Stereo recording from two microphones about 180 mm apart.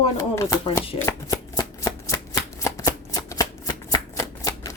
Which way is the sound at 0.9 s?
20° left (ahead or behind).